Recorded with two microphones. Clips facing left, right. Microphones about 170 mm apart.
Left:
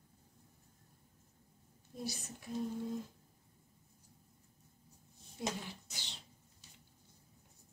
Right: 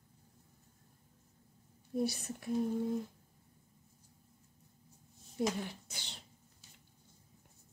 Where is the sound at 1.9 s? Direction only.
60° right (ahead or behind).